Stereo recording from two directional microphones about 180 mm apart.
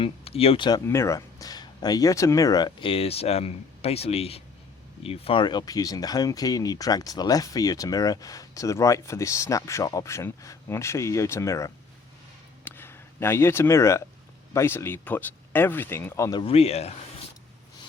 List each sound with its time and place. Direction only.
0.0 s speech: 35° left (ahead or behind)
0.9 s speech: 15° left (ahead or behind)
12.6 s a sound: 10° left (ahead or behind)
14.5 s speech: 15° left (ahead or behind)
16.4 s speech: 35° left (ahead or behind)